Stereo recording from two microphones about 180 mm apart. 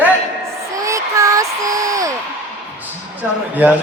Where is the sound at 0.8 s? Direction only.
15° right (ahead or behind).